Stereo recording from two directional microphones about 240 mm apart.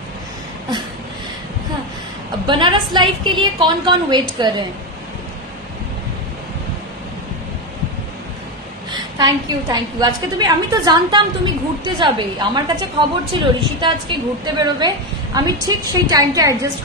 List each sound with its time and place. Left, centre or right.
2.4 s a woman's voice: centre
8.9 s a woman's voice: centre